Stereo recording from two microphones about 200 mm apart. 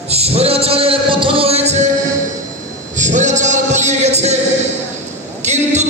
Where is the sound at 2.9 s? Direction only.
35° right (ahead or behind).